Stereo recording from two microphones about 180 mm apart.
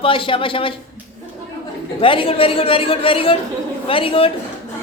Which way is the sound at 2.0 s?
30° left (ahead or behind).